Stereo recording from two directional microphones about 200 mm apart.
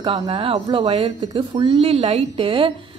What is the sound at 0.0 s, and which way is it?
A woman's voice, 25° right (ahead or behind).